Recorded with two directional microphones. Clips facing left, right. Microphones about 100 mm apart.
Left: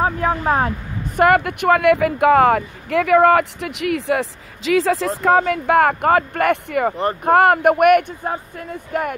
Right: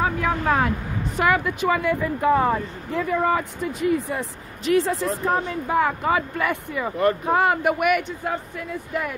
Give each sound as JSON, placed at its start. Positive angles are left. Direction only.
{"t": 0.0, "sound": "speech", "side_deg": 35}
{"t": 1.1, "sound": "speech", "side_deg": 55}
{"t": 8.2, "sound": "speech", "side_deg": 35}
{"t": 8.9, "sound": "speech", "side_deg": 55}